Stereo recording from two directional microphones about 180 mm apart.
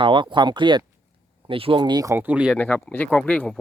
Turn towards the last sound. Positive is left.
turn(degrees=5)  # may be behind; listen again after turning